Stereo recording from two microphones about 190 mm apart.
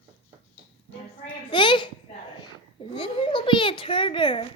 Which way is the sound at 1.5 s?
25° left (ahead or behind).